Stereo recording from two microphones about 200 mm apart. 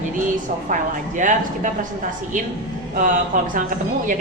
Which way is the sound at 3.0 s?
40° right (ahead or behind).